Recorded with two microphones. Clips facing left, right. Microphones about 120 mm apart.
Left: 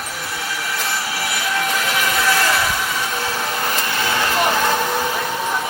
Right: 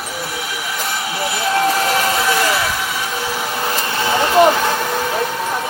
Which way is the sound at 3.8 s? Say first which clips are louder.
Right 6 dB; 25° right (ahead or behind).